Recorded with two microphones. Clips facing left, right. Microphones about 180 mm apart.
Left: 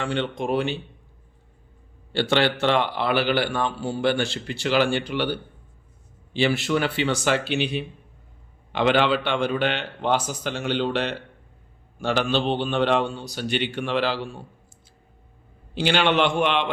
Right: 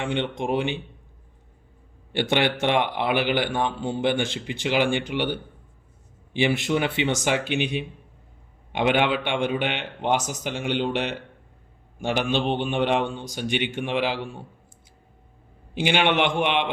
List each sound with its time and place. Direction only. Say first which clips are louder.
0.0 s a man's voice: even; 20° right (ahead or behind)
2.1 s a man's voice: left 1 dB; 15° right (ahead or behind)
15.8 s a man's voice: left 1 dB; 15° right (ahead or behind)